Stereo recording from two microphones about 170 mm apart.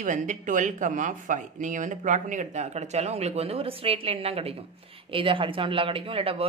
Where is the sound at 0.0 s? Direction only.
50° right (ahead or behind).